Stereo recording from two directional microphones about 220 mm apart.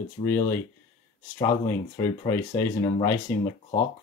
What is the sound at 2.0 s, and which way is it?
Speech, 15° left (ahead or behind).